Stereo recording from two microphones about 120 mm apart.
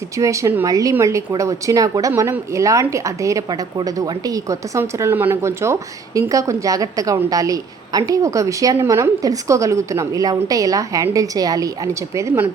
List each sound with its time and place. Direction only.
0.2 s a woman's voice: 25° right (ahead or behind)